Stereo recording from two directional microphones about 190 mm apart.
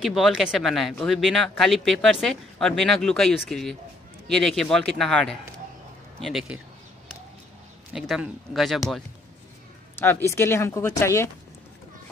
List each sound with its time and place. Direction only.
0.0 s speech: centre (ahead or behind)
7.9 s speech: centre (ahead or behind)
9.9 s speech: 15° left (ahead or behind)